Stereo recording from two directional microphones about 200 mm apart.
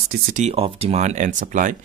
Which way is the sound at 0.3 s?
35° right (ahead or behind).